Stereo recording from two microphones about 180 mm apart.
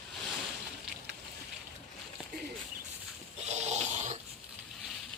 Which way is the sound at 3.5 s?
40° right (ahead or behind).